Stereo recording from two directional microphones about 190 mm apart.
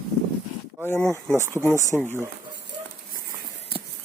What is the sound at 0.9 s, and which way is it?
Speech, 5° left (ahead or behind).